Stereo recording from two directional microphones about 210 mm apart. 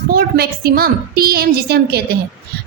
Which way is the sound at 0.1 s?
45° right (ahead or behind).